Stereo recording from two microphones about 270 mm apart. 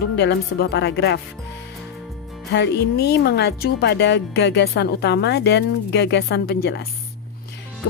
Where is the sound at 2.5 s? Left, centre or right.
Left.